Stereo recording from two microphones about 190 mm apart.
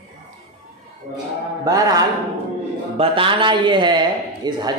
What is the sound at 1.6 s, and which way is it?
A man's voice, 20° right (ahead or behind).